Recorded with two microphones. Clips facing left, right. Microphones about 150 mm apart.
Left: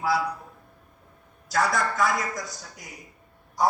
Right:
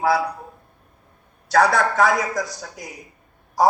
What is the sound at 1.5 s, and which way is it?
A man's voice, 75° right (ahead or behind).